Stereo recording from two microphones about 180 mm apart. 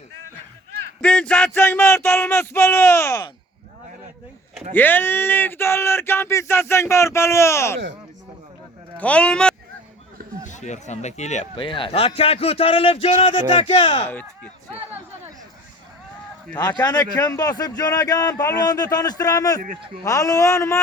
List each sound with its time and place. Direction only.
1.0 s speech: 5° left (ahead or behind)
4.7 s speech: 10° left (ahead or behind)
9.0 s speech: 5° left (ahead or behind)
10.4 s a man's voice: 40° left (ahead or behind)
14.1 s speech: 10° left (ahead or behind)
16.6 s a man's voice: 20° left (ahead or behind)